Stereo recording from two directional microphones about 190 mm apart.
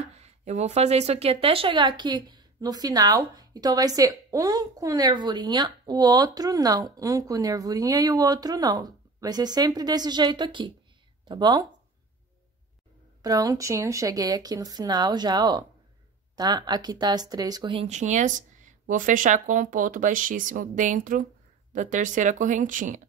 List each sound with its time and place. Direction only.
0.1 s a woman's voice: 35° right (ahead or behind)
13.2 s a woman's voice: 20° right (ahead or behind)
17.8 s speech: 40° right (ahead or behind)